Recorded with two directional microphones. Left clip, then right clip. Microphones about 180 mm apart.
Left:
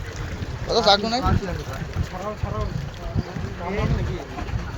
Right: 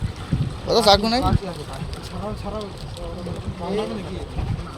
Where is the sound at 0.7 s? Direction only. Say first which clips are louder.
Right 2 dB; 45° right (ahead or behind).